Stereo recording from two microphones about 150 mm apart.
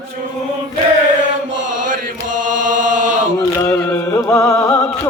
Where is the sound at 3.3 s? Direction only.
25° left (ahead or behind).